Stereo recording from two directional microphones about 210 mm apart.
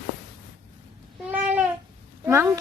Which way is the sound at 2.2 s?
15° right (ahead or behind).